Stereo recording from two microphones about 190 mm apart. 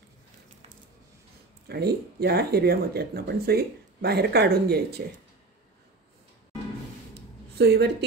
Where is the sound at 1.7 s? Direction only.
55° right (ahead or behind).